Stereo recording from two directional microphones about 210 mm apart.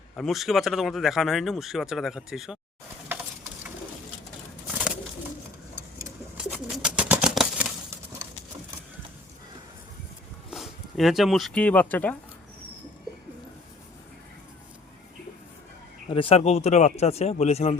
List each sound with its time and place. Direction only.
0.2 s speech: centre (ahead or behind)
6.3 s bird: 5° right (ahead or behind)
10.5 s speech: centre (ahead or behind)
16.0 s speech: 25° left (ahead or behind)